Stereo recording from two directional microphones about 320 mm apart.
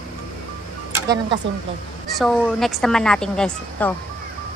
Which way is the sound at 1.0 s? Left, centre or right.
Right.